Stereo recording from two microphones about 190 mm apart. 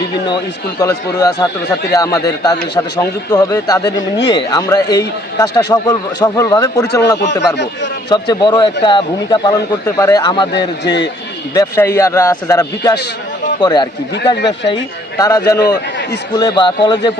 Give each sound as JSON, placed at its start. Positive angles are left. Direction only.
{"t": 0.8, "sound": "a man's voice", "side_deg": 20}
{"t": 8.1, "sound": "a man's voice", "side_deg": 25}
{"t": 11.5, "sound": "a man's voice", "side_deg": 20}
{"t": 14.3, "sound": "speech", "side_deg": 65}
{"t": 15.2, "sound": "a man's voice", "side_deg": 20}